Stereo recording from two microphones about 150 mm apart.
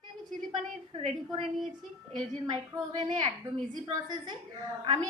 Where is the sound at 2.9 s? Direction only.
30° right (ahead or behind).